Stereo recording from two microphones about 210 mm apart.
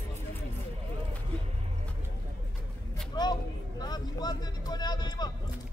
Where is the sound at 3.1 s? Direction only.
20° left (ahead or behind).